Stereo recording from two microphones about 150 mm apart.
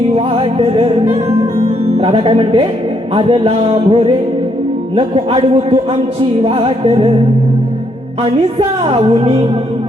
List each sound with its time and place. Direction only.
0.3 s music: 40° right (ahead or behind)
8.2 s music: 40° right (ahead or behind)